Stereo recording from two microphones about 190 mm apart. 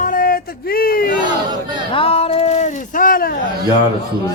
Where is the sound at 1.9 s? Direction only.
30° left (ahead or behind); by 3.4 s 50° left (ahead or behind).